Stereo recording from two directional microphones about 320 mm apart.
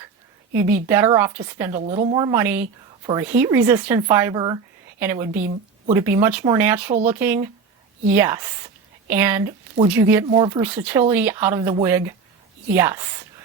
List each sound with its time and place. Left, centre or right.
0.5 s a woman's voice: centre